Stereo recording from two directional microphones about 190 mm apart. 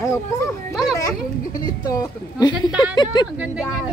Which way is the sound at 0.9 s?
20° left (ahead or behind).